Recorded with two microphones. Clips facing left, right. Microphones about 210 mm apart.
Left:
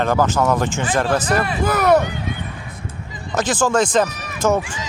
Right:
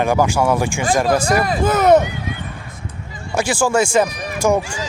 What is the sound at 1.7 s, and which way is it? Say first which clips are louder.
Speech: right 3 dB; 20° right (ahead or behind).